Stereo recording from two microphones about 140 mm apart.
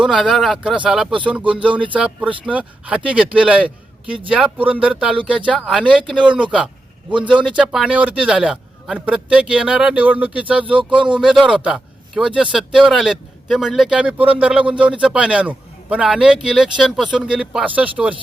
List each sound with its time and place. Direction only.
0.0 s a man's voice: centre (ahead or behind)
10.8 s speech: 35° right (ahead or behind)
11.1 s a man's voice: 5° right (ahead or behind)